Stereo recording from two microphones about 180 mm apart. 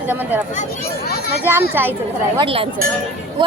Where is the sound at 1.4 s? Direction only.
10° right (ahead or behind).